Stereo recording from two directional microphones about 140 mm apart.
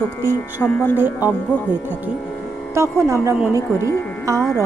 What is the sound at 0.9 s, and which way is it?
Speech, 15° right (ahead or behind).